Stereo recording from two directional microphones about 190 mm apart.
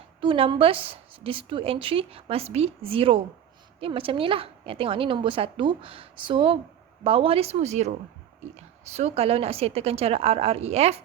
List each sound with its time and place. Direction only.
0.2 s a woman's voice: 30° right (ahead or behind)